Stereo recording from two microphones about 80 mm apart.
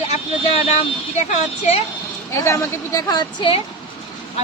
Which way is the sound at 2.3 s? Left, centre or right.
Left.